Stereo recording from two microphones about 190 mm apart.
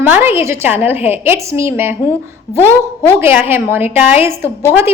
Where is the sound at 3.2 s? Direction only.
10° right (ahead or behind).